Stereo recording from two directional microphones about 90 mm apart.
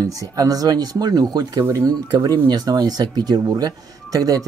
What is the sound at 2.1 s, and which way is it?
Speech, 50° right (ahead or behind).